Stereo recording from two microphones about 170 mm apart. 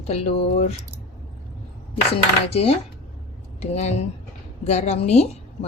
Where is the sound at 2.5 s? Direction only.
35° left (ahead or behind).